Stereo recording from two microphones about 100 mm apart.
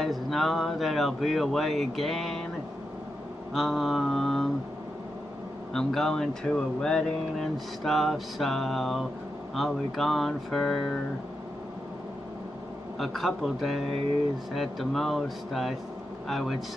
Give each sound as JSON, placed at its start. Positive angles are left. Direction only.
{"t": 0.0, "sound": "speech", "side_deg": 0}
{"t": 3.5, "sound": "speech", "side_deg": 0}
{"t": 5.7, "sound": "speech", "side_deg": 5}
{"t": 13.0, "sound": "speech", "side_deg": 0}